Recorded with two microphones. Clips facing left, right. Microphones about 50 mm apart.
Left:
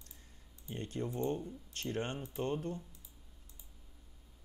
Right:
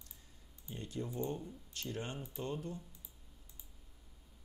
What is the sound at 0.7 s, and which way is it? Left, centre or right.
Speech, left.